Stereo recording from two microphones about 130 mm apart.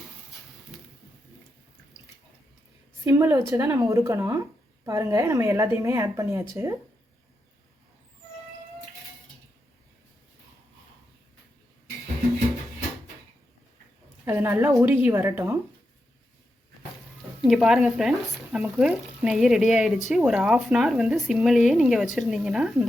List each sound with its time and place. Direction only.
3.0 s a woman's voice: 20° right (ahead or behind)
14.3 s a woman's voice: 15° right (ahead or behind)
17.4 s speech: centre (ahead or behind)